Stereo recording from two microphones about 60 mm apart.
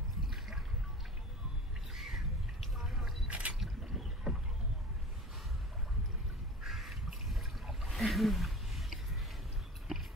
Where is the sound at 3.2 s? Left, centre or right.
Right.